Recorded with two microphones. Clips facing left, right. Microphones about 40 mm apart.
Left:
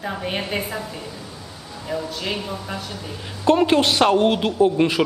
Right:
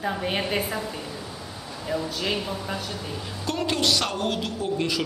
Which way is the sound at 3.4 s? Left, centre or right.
Left.